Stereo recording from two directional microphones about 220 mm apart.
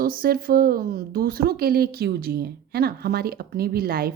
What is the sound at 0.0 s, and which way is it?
Speech, 40° right (ahead or behind).